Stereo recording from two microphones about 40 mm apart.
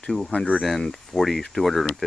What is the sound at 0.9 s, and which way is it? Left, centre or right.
Speech, centre.